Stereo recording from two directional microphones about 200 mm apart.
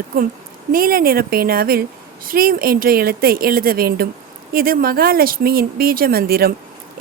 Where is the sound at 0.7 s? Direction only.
45° right (ahead or behind).